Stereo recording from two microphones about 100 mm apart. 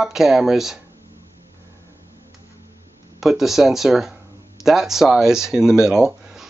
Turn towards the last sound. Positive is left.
turn(degrees=-5)  # may be behind; listen again after turning